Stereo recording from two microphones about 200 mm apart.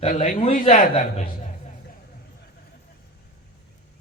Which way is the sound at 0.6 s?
35° left (ahead or behind).